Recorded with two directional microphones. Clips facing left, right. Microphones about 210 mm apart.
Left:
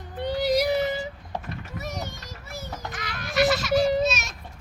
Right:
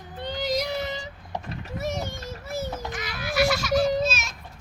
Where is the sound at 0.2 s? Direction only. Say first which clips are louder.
Left 5 dB; 10° left (ahead or behind).